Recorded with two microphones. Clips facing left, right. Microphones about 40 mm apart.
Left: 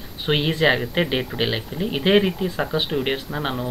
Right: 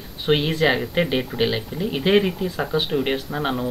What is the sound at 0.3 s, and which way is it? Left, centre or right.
Speech, centre.